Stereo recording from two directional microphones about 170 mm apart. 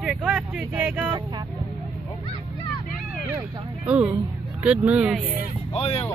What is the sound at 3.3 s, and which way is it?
Speech, 10° right (ahead or behind).